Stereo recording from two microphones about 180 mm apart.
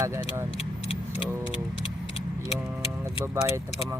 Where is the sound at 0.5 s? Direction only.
30° left (ahead or behind).